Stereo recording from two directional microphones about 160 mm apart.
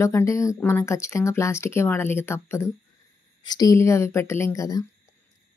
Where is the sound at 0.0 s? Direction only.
20° left (ahead or behind).